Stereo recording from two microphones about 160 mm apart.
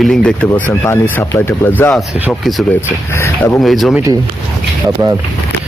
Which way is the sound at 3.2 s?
15° left (ahead or behind).